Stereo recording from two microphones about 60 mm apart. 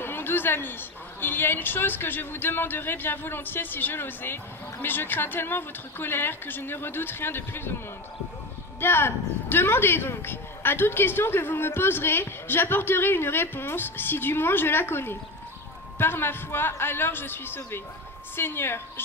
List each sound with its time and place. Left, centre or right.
0.0 s a sound: left
1.2 s speech: left
8.8 s speech: left